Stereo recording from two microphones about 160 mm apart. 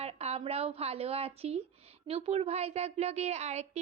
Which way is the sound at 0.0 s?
40° right (ahead or behind).